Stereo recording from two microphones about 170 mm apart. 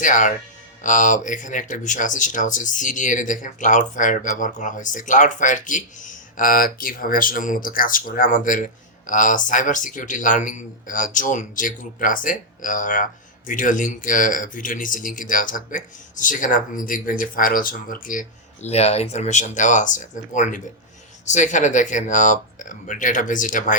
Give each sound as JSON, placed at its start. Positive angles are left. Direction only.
{"t": 0.0, "sound": "speech", "side_deg": 50}